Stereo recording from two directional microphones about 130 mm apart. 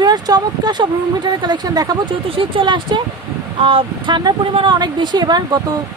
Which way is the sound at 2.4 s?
40° right (ahead or behind).